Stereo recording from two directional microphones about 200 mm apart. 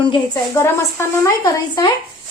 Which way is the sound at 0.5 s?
15° left (ahead or behind).